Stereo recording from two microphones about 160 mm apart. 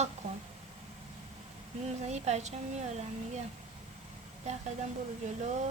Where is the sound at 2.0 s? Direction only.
45° right (ahead or behind).